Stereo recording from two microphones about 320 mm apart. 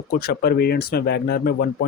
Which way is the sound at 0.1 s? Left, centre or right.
Left.